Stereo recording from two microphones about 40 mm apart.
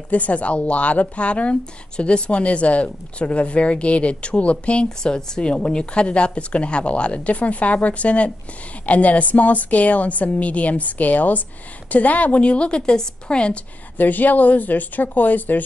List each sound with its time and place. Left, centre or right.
0.1 s a woman's voice: left
4.8 s a woman's voice: centre
13.9 s speech: left